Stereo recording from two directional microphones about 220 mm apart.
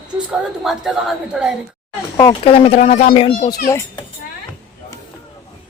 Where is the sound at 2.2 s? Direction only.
20° left (ahead or behind).